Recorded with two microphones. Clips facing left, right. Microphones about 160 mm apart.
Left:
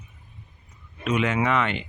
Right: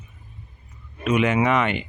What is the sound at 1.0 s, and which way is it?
Speech, 15° right (ahead or behind).